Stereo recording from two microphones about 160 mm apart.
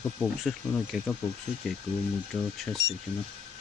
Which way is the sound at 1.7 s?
5° left (ahead or behind).